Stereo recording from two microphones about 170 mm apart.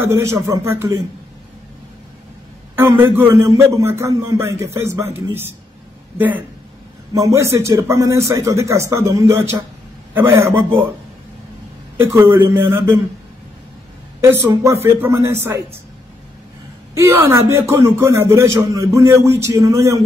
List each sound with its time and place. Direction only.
0.0 s a man's voice: 15° right (ahead or behind)
2.7 s a man's voice: 10° right (ahead or behind)
12.0 s a man's voice: 15° right (ahead or behind)
14.4 s a man's voice: 15° right (ahead or behind)
16.9 s a man's voice: 15° right (ahead or behind)